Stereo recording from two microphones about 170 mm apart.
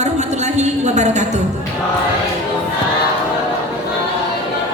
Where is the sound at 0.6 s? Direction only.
40° right (ahead or behind).